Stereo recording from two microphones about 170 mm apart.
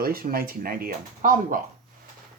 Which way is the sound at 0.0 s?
60° right (ahead or behind).